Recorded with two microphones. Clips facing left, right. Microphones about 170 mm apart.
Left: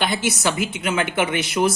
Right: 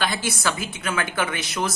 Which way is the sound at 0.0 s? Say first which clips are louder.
Left 3 dB; 20° left (ahead or behind).